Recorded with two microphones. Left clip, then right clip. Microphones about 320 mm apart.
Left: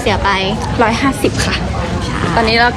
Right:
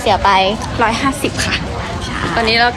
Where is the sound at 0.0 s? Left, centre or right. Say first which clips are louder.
Right 3 dB; centre.